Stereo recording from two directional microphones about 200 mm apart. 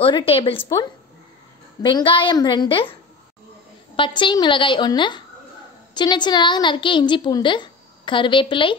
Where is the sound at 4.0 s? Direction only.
25° left (ahead or behind).